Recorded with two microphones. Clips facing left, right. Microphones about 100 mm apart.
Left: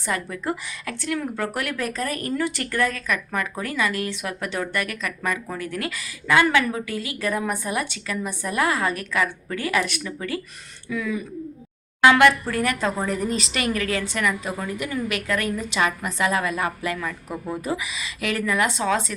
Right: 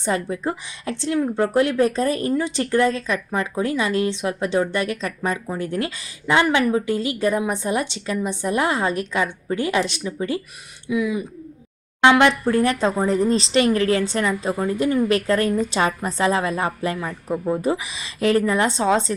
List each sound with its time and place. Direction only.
0.0 s speech: 25° right (ahead or behind)